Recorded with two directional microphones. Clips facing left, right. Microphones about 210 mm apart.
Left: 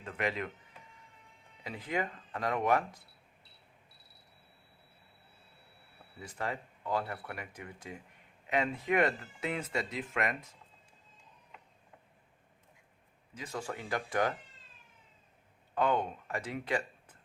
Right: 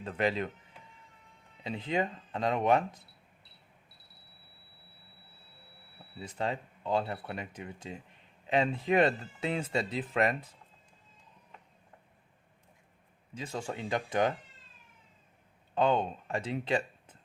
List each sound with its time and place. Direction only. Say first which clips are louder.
0.0 s speech: right 4 dB; 30° right (ahead or behind)
1.6 s speech: right 4 dB; 25° right (ahead or behind)
6.1 s speech: right 4 dB; 25° right (ahead or behind)
13.3 s speech: right 2 dB; 25° right (ahead or behind)
15.7 s speech: right 3 dB; 25° right (ahead or behind)